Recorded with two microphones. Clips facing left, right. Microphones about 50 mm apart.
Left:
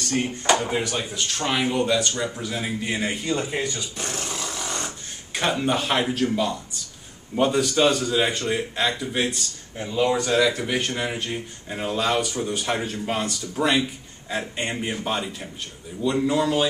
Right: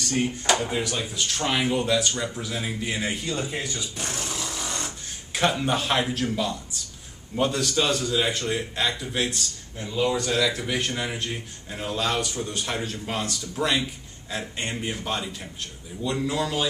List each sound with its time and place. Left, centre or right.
0.5 s speech: centre
1.1 s speech: centre
4.6 s a sound: centre
5.3 s speech: centre